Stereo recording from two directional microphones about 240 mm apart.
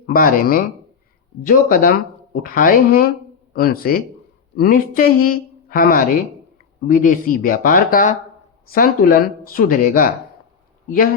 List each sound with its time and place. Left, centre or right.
0.0 s a woman's voice: left